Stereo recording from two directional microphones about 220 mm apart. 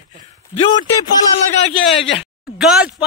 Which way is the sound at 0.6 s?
20° left (ahead or behind).